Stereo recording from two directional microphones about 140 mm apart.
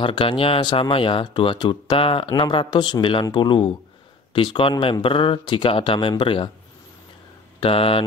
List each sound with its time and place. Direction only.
0.0 s speech: 35° left (ahead or behind)
7.6 s speech: 40° left (ahead or behind)